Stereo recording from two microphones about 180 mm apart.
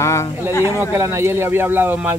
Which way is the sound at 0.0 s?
15° left (ahead or behind).